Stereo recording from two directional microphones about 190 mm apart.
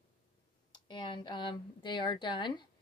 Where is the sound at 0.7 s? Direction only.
25° left (ahead or behind).